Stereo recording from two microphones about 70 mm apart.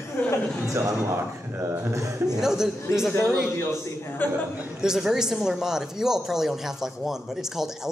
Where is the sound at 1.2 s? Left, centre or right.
Right.